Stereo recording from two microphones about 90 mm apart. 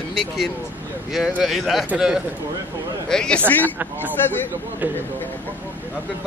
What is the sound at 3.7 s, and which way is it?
Speech, 20° right (ahead or behind).